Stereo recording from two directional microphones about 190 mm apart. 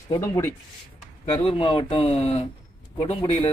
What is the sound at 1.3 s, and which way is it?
Speech, 30° left (ahead or behind).